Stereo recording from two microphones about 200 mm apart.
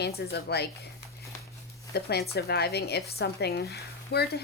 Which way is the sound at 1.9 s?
55° left (ahead or behind).